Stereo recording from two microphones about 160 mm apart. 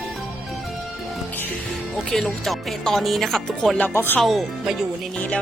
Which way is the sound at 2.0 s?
Centre (ahead or behind).